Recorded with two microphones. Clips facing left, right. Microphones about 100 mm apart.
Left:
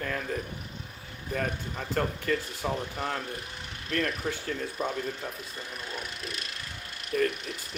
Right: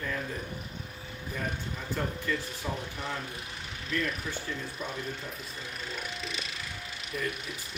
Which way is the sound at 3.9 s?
50° left (ahead or behind).